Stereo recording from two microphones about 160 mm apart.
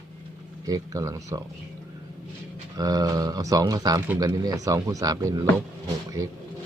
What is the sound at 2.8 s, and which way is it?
Speech, 25° right (ahead or behind).